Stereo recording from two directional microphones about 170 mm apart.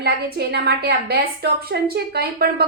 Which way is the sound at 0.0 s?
70° right (ahead or behind).